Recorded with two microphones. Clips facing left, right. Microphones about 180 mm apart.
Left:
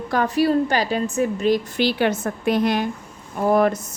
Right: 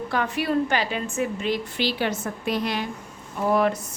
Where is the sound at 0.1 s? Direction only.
40° left (ahead or behind).